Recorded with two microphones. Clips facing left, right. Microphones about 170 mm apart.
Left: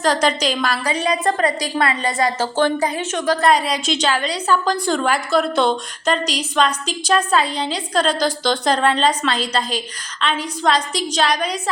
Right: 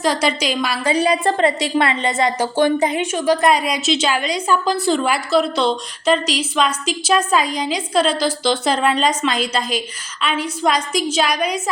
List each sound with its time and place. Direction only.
0.0 s a woman's voice: 10° right (ahead or behind)
0.9 s a woman's voice: 30° right (ahead or behind)
3.1 s a woman's voice: 10° right (ahead or behind)
9.3 s a woman's voice: 35° left (ahead or behind)
10.2 s a woman's voice: 10° right (ahead or behind)